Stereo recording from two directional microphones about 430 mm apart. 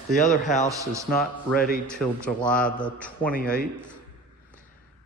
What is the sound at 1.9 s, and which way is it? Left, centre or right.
A man's voice, centre.